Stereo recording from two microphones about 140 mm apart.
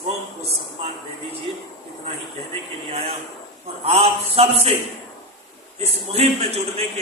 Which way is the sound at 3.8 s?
45° right (ahead or behind).